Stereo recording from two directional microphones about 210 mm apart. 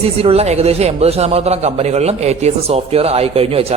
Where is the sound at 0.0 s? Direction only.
30° right (ahead or behind).